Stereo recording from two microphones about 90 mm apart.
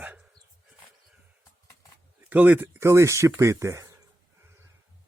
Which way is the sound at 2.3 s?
20° right (ahead or behind).